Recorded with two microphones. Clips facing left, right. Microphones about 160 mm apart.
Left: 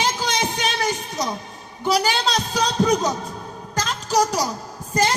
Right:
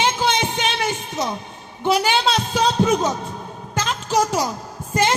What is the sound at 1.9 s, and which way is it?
Speech, 40° left (ahead or behind).